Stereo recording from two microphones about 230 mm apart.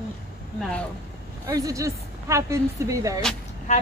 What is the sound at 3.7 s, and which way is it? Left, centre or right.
Speech, left.